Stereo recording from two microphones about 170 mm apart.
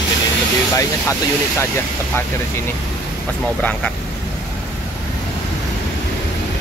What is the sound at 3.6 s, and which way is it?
Speech, 10° left (ahead or behind).